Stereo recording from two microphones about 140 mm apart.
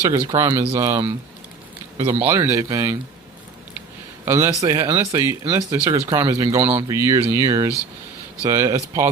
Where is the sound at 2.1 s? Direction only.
20° right (ahead or behind).